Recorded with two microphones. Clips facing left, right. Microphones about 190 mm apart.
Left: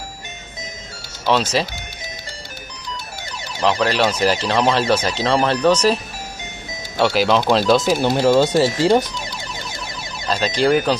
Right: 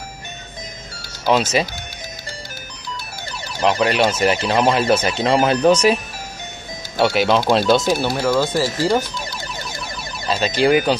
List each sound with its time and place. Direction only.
1.2 s speech: 5° right (ahead or behind)
3.6 s speech: 5° right (ahead or behind)
7.0 s speech: centre (ahead or behind)
8.0 s speech: 20° left (ahead or behind)
10.2 s speech: 5° right (ahead or behind)